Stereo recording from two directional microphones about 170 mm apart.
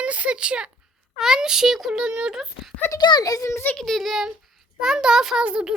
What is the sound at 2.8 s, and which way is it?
Speech, 20° left (ahead or behind).